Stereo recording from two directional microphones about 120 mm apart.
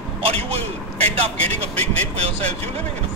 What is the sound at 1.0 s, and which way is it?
Speech, 60° right (ahead or behind).